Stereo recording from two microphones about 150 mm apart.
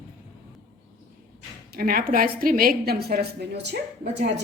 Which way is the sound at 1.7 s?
80° right.